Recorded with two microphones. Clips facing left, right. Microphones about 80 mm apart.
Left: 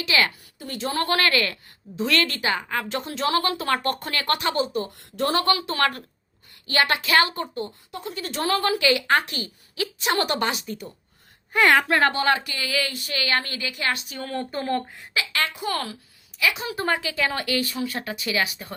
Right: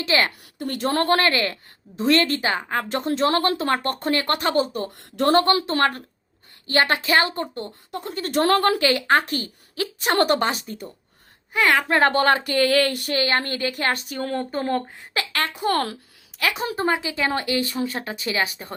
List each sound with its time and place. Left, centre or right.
0.0 s a woman's voice: right
0.3 s speech: right
1.1 s a woman's voice: right
7.5 s speech: right
8.8 s a woman's voice: right
11.5 s a woman's voice: centre
11.9 s speech: right
12.1 s speech: right
13.1 s a woman's voice: right
14.2 s a woman's voice: right
15.1 s speech: right
16.8 s speech: right